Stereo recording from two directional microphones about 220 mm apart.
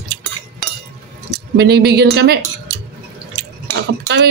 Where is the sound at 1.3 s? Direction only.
50° right (ahead or behind).